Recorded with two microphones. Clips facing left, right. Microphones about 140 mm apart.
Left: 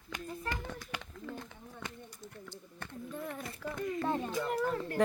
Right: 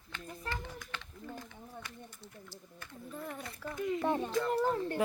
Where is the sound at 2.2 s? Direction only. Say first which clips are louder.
Left 3 dB; 55° left (ahead or behind).